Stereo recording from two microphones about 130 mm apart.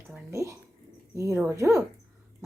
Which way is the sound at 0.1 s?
25° right (ahead or behind).